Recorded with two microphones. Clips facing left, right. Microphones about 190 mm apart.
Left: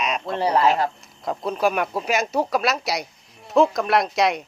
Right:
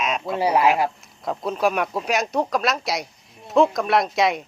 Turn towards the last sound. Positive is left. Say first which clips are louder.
# even
turn(degrees=0)  # may be behind; listen again after turning